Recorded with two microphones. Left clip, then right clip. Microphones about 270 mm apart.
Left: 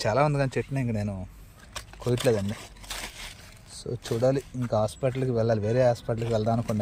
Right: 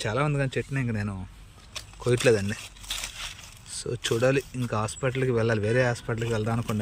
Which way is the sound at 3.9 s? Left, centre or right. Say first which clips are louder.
Right 1 dB; centre.